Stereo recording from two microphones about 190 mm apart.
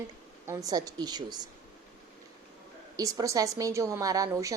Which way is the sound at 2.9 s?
20° right (ahead or behind).